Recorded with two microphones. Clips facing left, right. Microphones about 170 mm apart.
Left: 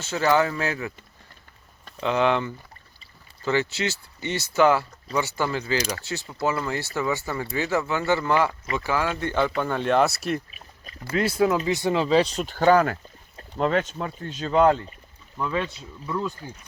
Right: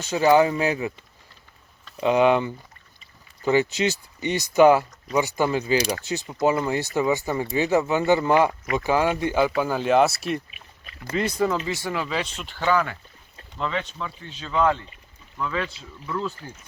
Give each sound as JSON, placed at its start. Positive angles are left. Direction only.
{"t": 0.0, "sound": "speech", "side_deg": -15}
{"t": 2.0, "sound": "speech", "side_deg": -15}
{"t": 11.6, "sound": "speech", "side_deg": 20}
{"t": 15.4, "sound": "speech", "side_deg": 20}